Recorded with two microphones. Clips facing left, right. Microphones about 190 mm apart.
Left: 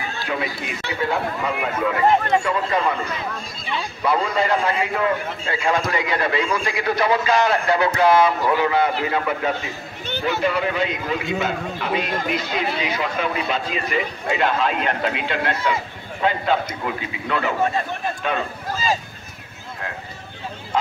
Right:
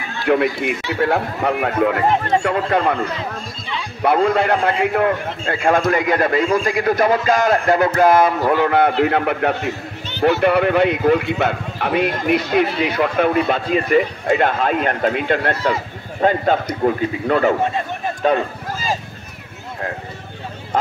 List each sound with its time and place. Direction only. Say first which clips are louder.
0.2 s speech: right 12 dB; 60° right (ahead or behind)
4.0 s speech: right 6 dB; 60° right (ahead or behind); by 18.4 s 40° right (ahead or behind)